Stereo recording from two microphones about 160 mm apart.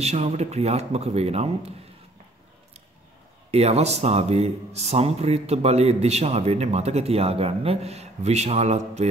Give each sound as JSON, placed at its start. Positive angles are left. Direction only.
{"t": 0.0, "sound": "a man's voice", "side_deg": -40}
{"t": 3.5, "sound": "a man's voice", "side_deg": -40}